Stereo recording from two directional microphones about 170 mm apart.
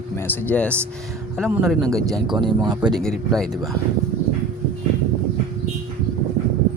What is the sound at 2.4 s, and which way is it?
Speech, 25° right (ahead or behind).